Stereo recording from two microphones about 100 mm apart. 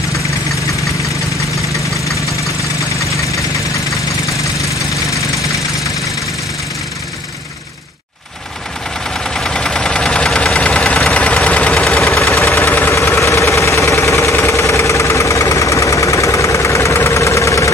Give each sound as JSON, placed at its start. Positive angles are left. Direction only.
{"t": 9.2, "sound": "engine", "side_deg": 5}
{"t": 12.5, "sound": "engine", "side_deg": 20}